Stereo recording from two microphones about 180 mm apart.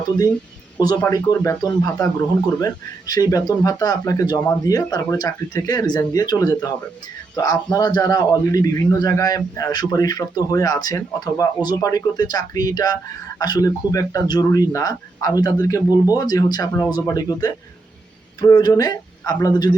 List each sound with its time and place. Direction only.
0.8 s a man's voice: 20° left (ahead or behind)